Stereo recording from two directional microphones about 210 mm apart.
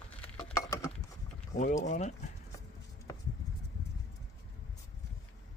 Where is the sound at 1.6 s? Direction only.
35° left (ahead or behind).